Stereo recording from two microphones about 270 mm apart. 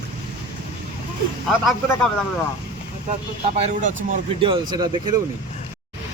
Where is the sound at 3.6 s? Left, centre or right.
Right.